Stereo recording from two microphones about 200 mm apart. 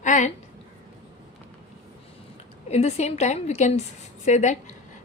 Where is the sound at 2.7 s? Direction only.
30° left (ahead or behind).